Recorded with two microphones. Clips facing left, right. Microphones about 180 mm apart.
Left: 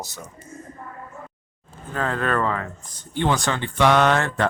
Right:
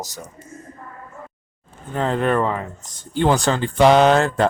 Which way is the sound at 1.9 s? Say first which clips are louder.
Right 4 dB; 20° right (ahead or behind).